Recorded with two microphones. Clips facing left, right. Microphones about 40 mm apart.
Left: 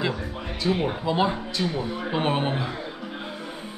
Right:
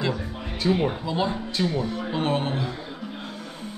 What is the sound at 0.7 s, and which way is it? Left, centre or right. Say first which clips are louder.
Speech: right 1 dB; centre.